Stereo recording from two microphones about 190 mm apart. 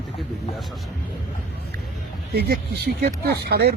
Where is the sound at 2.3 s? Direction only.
60° right (ahead or behind).